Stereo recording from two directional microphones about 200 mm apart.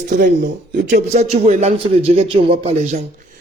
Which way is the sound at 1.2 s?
30° right (ahead or behind).